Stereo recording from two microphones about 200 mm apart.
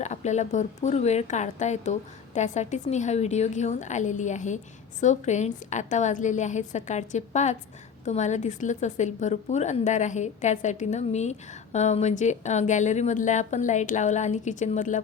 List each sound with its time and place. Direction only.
0.0 s a woman's voice: 35° left (ahead or behind)